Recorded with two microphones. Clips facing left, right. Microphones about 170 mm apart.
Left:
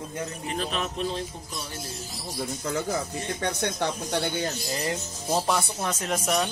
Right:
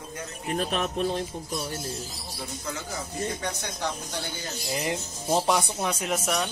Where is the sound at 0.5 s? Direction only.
50° right (ahead or behind).